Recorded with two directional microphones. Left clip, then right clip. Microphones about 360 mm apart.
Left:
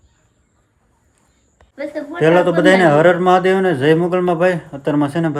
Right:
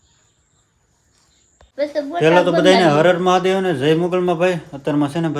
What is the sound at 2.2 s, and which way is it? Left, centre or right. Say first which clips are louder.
A man's voice: left 1 dB; centre.